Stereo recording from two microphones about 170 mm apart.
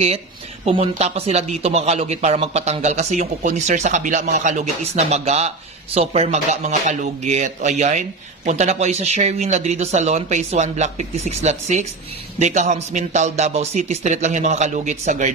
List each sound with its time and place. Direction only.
0.7 s speech: 40° right (ahead or behind)